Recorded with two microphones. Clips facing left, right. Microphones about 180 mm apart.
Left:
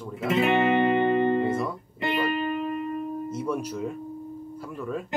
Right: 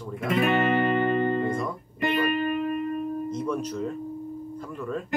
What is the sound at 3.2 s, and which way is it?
Speech, 10° left (ahead or behind).